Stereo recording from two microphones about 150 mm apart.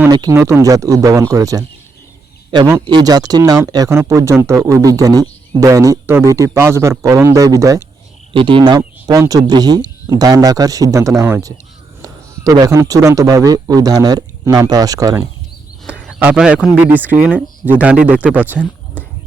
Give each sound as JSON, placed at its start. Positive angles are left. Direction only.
{"t": 0.1, "sound": "speech", "side_deg": -25}
{"t": 8.3, "sound": "speech", "side_deg": -35}
{"t": 16.0, "sound": "speech", "side_deg": -5}